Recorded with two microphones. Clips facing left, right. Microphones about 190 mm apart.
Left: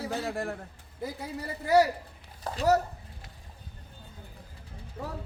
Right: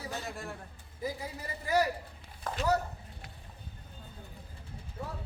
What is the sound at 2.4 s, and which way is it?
Speech, 35° left (ahead or behind).